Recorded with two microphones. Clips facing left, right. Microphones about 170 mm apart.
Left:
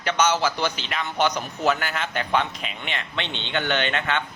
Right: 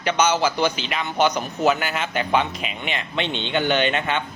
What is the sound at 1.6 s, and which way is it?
Speech, 15° right (ahead or behind).